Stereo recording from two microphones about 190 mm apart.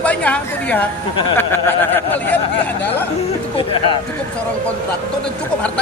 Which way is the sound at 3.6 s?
25° left (ahead or behind).